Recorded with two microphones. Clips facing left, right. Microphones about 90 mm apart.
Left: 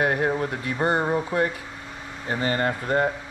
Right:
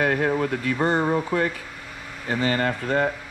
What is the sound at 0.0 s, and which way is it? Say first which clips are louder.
Speech: right 1 dB; 25° left (ahead or behind).